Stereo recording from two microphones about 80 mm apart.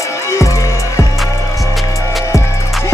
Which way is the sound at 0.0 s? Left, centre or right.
Left.